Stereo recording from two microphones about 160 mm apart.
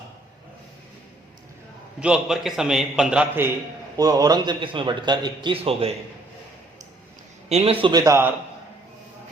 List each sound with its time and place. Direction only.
2.0 s a man's voice: 5° right (ahead or behind)
3.9 s a man's voice: 25° right (ahead or behind)
7.5 s a man's voice: 35° right (ahead or behind); by 8.3 s 20° right (ahead or behind)